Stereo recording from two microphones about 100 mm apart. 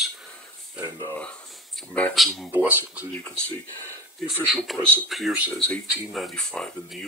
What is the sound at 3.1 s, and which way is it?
Speech, 15° left (ahead or behind).